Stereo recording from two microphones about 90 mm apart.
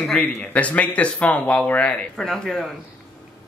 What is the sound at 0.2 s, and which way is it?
Speech, 15° left (ahead or behind).